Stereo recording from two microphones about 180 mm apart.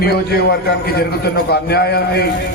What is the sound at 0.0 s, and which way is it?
A man's voice, 60° left (ahead or behind).